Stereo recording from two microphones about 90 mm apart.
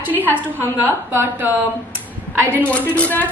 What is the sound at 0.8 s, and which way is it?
Speech, 25° right (ahead or behind).